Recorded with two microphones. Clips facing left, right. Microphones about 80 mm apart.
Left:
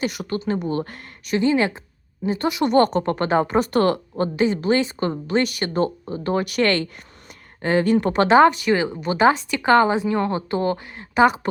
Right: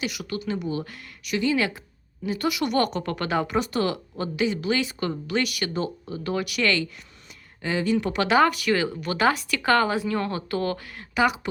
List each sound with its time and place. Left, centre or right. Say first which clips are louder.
0.0 s a woman's voice: left 5 dB; left
3.7 s a woman's voice: left 7 dB; left